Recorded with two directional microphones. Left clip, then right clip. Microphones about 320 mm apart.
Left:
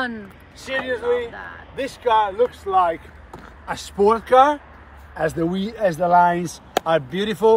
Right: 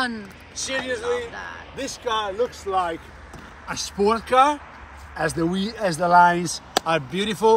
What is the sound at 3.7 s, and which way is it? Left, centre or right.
Speech, centre.